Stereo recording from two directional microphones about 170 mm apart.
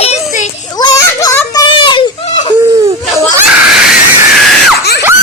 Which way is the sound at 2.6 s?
20° right (ahead or behind).